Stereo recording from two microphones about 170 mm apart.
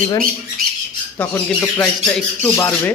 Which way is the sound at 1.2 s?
10° left (ahead or behind).